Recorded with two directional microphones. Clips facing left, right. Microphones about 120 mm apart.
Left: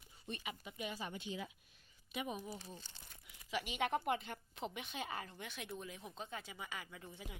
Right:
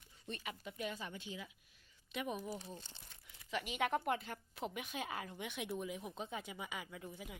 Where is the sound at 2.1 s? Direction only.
5° left (ahead or behind).